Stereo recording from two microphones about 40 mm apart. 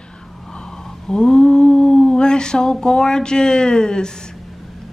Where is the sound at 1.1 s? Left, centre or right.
Centre.